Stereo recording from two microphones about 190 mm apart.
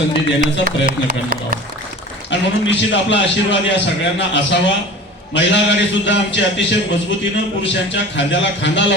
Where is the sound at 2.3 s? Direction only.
70° left (ahead or behind).